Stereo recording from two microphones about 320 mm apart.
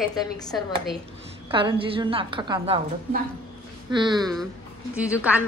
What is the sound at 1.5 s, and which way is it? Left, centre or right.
A woman's voice, centre.